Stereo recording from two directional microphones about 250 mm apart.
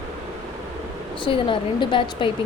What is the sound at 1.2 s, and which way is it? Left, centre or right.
Speech, centre.